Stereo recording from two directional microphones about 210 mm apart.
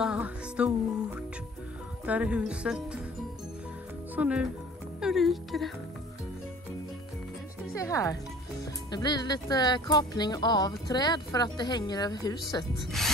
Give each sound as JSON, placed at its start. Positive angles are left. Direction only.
{"t": 0.0, "sound": "music", "side_deg": -5}
{"t": 2.0, "sound": "speech", "side_deg": -5}
{"t": 4.1, "sound": "speech", "side_deg": -5}
{"t": 7.7, "sound": "speech", "side_deg": 15}